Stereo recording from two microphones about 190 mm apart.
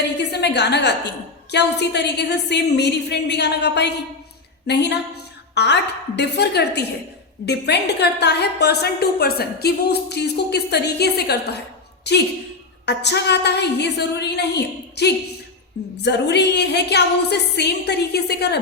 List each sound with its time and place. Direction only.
0.2 s a woman's voice: 60° left (ahead or behind)